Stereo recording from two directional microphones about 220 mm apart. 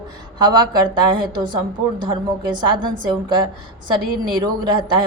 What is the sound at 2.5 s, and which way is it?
A woman's voice, 20° right (ahead or behind).